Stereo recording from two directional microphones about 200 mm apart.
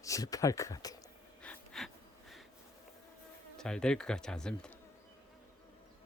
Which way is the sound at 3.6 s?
5° left (ahead or behind).